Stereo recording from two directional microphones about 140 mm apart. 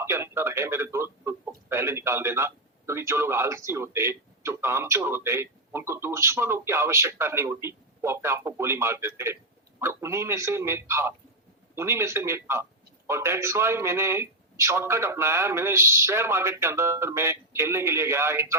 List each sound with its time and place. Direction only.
0.0 s speech: 20° right (ahead or behind)